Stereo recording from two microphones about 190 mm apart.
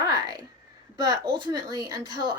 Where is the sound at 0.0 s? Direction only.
20° right (ahead or behind).